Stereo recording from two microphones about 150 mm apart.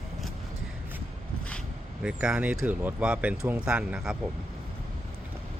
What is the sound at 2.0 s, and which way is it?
Speech, 5° right (ahead or behind).